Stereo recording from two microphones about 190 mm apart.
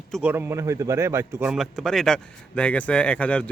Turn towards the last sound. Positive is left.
turn(degrees=5)  # may be behind; listen again after turning